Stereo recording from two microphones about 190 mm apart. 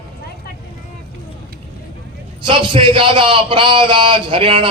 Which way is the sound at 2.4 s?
25° right (ahead or behind).